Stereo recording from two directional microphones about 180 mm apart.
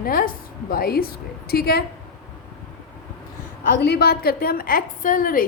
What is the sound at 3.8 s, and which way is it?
A woman's voice, 65° left (ahead or behind).